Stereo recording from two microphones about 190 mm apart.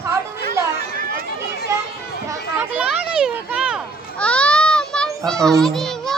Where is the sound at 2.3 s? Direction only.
10° right (ahead or behind).